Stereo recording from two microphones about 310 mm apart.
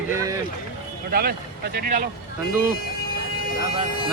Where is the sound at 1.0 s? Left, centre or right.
Right.